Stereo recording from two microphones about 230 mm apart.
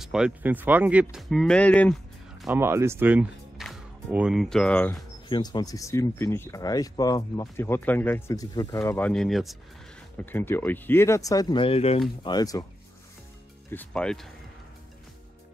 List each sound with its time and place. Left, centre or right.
0.0 s speech: centre
2.4 s speech: centre
5.3 s speech: centre
13.7 s speech: centre